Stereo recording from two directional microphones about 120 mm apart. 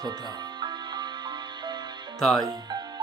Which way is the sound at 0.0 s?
35° right (ahead or behind).